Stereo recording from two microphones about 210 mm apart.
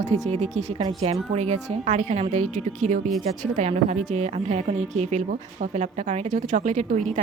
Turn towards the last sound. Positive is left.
turn(degrees=-35)  # may be behind; listen again after turning